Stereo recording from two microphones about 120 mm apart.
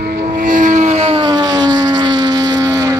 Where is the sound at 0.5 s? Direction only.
90° right.